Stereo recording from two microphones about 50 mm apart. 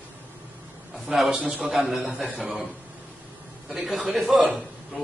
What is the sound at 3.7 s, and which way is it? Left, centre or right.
A man's voice, centre.